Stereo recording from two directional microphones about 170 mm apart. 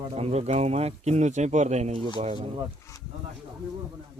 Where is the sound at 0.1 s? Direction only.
40° right (ahead or behind).